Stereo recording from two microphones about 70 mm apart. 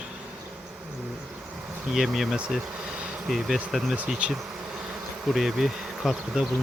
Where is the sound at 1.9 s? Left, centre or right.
Centre.